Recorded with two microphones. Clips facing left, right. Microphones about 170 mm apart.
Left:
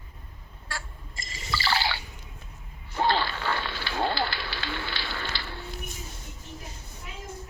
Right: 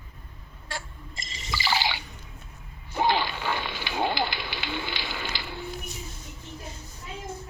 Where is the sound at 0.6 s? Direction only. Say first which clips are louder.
Right 2 dB; 20° right (ahead or behind).